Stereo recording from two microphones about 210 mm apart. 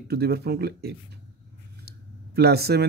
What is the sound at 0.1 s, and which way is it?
Speech, 50° right (ahead or behind).